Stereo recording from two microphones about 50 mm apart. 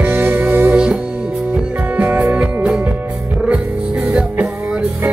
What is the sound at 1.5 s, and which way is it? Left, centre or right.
Music, right.